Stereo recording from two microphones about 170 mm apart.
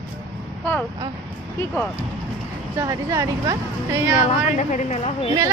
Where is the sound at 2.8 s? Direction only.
20° right (ahead or behind).